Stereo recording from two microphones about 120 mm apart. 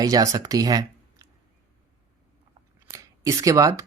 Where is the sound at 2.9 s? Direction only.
25° right (ahead or behind).